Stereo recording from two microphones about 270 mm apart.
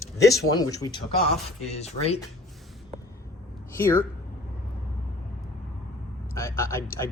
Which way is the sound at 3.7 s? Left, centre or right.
Centre.